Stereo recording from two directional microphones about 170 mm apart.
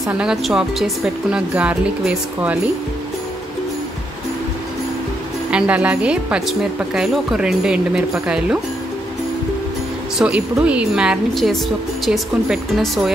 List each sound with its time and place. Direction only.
0.1 s speech: 5° right (ahead or behind)
5.5 s speech: 5° right (ahead or behind)
10.1 s speech: 5° right (ahead or behind)